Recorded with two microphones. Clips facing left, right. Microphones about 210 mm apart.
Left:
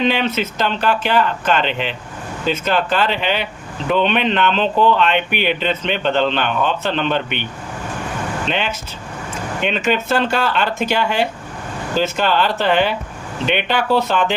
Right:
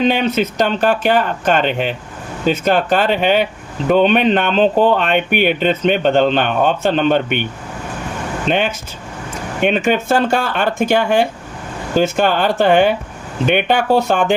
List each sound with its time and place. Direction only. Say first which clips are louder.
0.0 s speech: right 3 dB; 50° right (ahead or behind)
8.4 s speech: right 5 dB; 50° right (ahead or behind)